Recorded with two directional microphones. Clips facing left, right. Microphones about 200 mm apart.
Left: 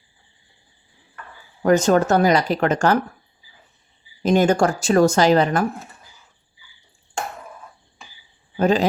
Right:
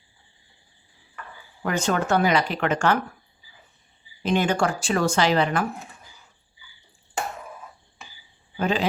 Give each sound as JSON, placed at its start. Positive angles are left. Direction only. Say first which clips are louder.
{"t": 1.6, "sound": "speech", "louder": "left 8 dB", "side_deg": 40}
{"t": 4.2, "sound": "speech", "louder": "left 6 dB", "side_deg": 40}
{"t": 8.5, "sound": "speech", "louder": "left 6 dB", "side_deg": 40}